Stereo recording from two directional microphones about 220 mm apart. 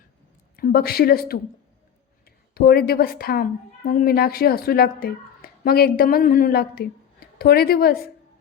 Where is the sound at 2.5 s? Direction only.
45° left (ahead or behind).